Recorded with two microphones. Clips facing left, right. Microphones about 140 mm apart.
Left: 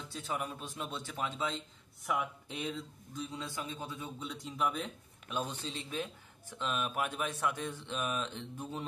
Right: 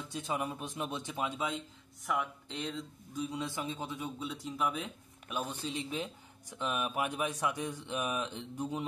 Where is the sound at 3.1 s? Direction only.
15° right (ahead or behind).